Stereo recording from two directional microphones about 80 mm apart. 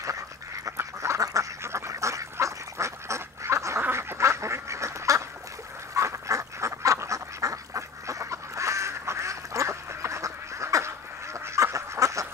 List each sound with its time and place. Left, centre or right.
0.7 s duck: right
5.9 s goose: right